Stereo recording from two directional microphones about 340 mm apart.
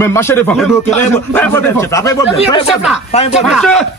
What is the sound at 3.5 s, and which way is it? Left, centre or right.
Speech, centre.